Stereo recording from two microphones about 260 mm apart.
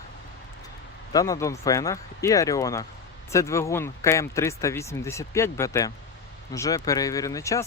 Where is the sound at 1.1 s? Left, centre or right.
Centre.